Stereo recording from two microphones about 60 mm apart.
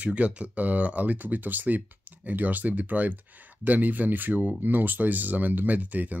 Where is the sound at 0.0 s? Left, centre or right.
Right.